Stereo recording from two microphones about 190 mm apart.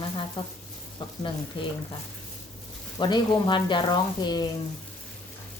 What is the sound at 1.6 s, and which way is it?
Speech, 25° left (ahead or behind).